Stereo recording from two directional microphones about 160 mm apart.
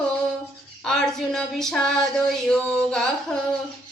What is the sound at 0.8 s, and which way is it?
Speech, 5° left (ahead or behind).